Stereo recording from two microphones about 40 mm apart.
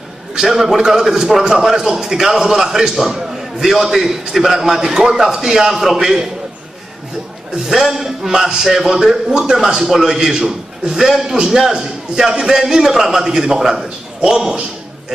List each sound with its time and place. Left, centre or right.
0.4 s a man's voice: centre
5.9 s a man's voice: centre
7.5 s a man's voice: centre
9.8 s a man's voice: centre